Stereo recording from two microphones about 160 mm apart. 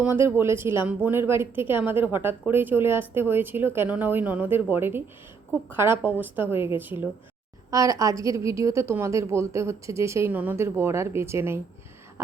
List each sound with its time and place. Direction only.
0.0 s a woman's voice: 15° right (ahead or behind)